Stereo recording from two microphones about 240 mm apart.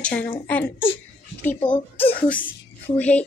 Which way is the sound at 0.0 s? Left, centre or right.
Centre.